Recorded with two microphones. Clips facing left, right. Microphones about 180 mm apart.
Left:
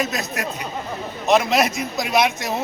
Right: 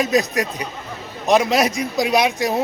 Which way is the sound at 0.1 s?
15° right (ahead or behind).